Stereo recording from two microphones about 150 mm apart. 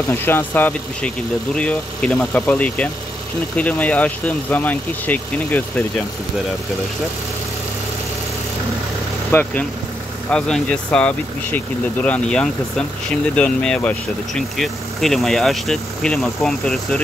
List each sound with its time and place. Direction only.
0.1 s speech: 15° left (ahead or behind)
9.3 s speech: 10° left (ahead or behind)